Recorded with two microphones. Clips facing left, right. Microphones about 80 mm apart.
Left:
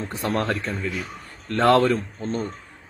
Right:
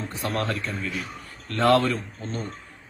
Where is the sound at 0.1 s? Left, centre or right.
Left.